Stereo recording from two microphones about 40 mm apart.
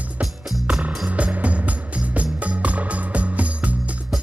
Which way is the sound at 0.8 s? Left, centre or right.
Right.